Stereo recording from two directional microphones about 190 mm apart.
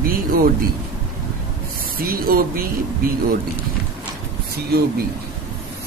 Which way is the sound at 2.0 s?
50° right (ahead or behind).